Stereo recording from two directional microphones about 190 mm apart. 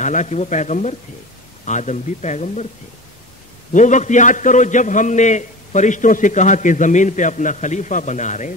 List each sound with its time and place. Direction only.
0.0 s a man's voice: 40° left (ahead or behind)
3.7 s a man's voice: 40° left (ahead or behind)